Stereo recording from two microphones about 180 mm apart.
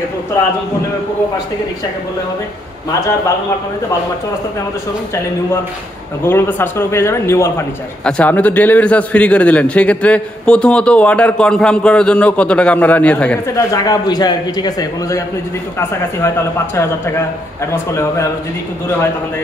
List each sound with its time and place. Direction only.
6.2 s a man's voice: 15° left (ahead or behind)
17.9 s a man's voice: 15° left (ahead or behind)